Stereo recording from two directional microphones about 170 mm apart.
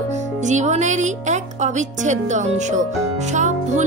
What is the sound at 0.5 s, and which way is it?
A woman's voice, 45° right (ahead or behind).